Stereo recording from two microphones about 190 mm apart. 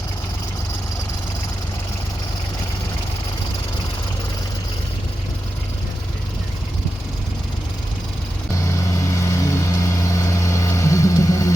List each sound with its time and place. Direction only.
9.2 s vehicle: 15° left (ahead or behind)